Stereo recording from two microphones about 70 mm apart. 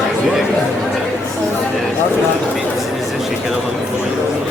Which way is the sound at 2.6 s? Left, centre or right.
Centre.